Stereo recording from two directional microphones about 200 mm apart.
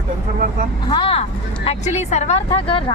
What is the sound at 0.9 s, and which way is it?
Speech, 25° left (ahead or behind).